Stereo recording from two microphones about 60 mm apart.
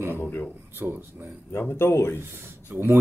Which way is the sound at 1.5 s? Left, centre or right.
Left.